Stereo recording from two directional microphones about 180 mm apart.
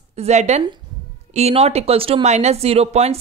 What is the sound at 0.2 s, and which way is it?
Speech, 40° right (ahead or behind).